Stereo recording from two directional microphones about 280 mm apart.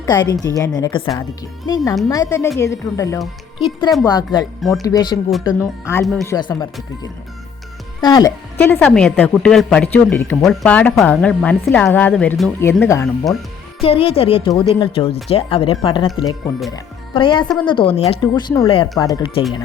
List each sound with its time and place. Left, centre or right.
0.0 s a woman's voice: centre
8.0 s a woman's voice: centre
13.8 s speech: centre